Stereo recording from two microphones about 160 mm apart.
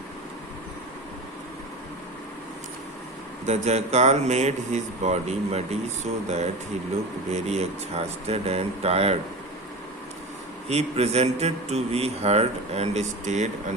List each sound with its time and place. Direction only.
3.4 s a man's voice: 45° right (ahead or behind)
10.7 s a man's voice: 40° right (ahead or behind)